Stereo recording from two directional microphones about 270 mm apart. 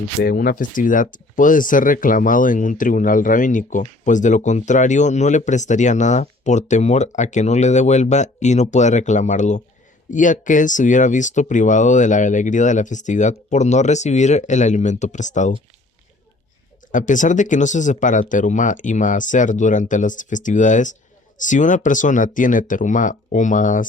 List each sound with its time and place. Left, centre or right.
0.2 s speech: left
16.9 s speech: left